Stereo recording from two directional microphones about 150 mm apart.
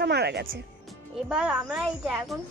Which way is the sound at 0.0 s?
90° right.